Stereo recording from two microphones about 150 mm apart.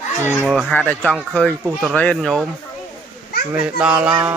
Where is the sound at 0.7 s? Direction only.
10° left (ahead or behind).